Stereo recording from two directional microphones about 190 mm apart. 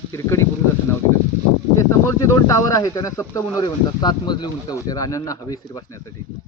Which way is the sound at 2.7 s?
15° left (ahead or behind).